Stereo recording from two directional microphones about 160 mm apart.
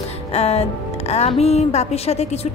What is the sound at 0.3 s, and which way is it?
Music, 40° left (ahead or behind).